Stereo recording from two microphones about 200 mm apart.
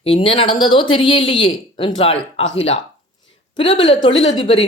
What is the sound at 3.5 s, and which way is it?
Speech, 25° left (ahead or behind).